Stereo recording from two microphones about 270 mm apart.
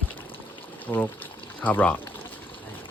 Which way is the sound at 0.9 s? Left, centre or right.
Centre.